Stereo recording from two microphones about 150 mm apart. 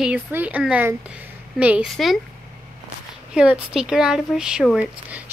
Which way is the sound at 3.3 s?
5° right (ahead or behind).